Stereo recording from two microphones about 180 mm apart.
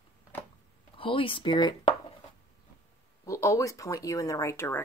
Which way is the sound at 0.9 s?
30° left (ahead or behind).